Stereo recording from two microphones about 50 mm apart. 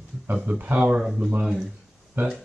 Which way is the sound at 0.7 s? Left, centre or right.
Right.